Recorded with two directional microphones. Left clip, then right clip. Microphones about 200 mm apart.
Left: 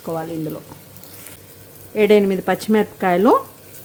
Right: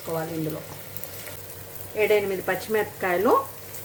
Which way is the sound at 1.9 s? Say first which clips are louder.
Left 7 dB; 60° left (ahead or behind).